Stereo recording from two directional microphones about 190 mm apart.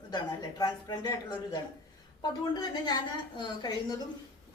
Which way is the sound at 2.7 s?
20° left (ahead or behind).